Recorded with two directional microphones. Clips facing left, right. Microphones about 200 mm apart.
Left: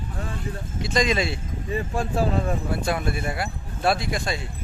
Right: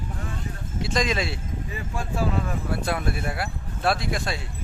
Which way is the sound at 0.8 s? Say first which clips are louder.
Left 2 dB; centre (ahead or behind).